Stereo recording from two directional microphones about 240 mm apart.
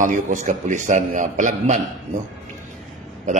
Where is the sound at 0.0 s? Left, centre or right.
Right.